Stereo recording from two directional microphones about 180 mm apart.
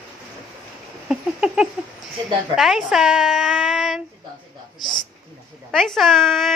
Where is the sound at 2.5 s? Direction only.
Centre (ahead or behind).